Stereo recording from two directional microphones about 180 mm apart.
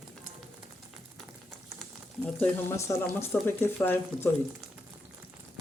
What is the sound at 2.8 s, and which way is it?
Speech, 15° left (ahead or behind).